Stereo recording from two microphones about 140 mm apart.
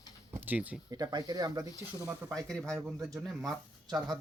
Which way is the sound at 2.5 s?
5° left (ahead or behind).